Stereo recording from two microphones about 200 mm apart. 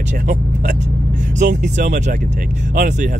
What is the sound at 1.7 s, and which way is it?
Speech, 40° right (ahead or behind).